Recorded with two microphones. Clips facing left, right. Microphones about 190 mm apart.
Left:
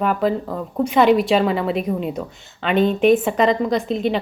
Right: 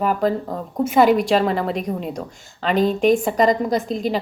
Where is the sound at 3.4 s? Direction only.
45° right (ahead or behind).